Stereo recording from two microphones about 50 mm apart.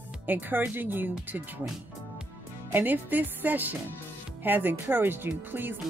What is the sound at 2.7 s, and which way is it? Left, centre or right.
Speech, right.